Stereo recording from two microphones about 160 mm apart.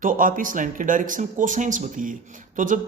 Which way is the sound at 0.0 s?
60° right (ahead or behind).